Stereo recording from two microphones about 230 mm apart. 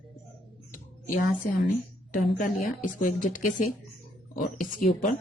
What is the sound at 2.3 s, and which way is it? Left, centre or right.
Speech, left.